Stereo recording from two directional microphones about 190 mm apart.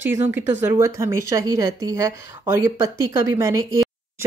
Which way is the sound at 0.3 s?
10° right (ahead or behind).